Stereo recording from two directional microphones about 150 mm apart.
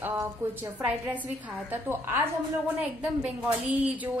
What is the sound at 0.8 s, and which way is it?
A woman's voice, 10° right (ahead or behind).